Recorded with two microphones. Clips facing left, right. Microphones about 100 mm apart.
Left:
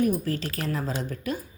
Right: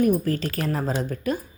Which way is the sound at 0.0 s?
45° right (ahead or behind).